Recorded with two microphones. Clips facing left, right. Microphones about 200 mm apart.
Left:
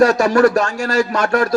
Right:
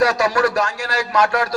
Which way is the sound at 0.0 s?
50° left (ahead or behind).